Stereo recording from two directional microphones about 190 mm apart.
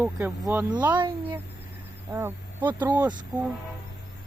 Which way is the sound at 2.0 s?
15° right (ahead or behind).